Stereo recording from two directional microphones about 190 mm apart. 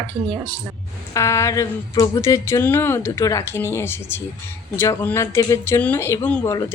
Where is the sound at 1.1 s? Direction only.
15° left (ahead or behind).